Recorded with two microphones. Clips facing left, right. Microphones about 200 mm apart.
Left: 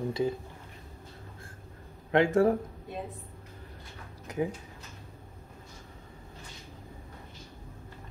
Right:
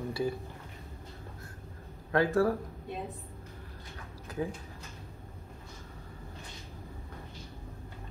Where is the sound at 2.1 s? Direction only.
20° left (ahead or behind).